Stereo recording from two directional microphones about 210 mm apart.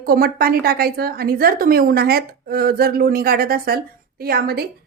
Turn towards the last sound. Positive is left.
turn(degrees=-50)  # may be behind; listen again after turning